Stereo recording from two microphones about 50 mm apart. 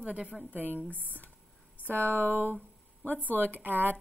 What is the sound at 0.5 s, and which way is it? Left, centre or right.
Speech, right.